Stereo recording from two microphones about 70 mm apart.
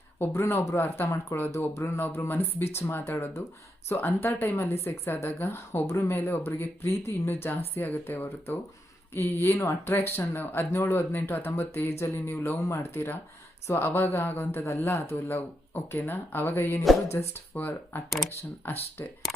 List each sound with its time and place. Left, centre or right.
0.4 s speech: left
1.7 s speech: left
12.5 s speech: left
17.1 s speech: left
17.5 s speech: left